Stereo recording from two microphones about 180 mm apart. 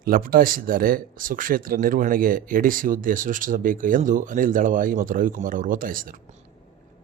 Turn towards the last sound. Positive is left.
turn(degrees=-50)  # may be behind; listen again after turning